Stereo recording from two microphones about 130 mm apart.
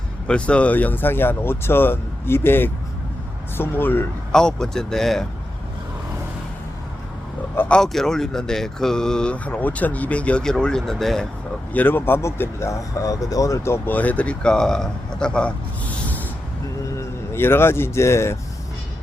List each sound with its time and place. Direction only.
0.3 s speech: 10° left (ahead or behind)
4.3 s speech: 5° left (ahead or behind)
7.5 s speech: 15° left (ahead or behind)
7.8 s speech: 5° left (ahead or behind)
11.7 s speech: 15° left (ahead or behind)